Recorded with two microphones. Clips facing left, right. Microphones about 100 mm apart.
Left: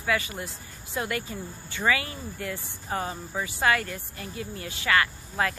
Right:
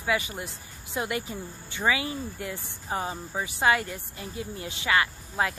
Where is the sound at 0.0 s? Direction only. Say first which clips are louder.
Even; 20° right (ahead or behind).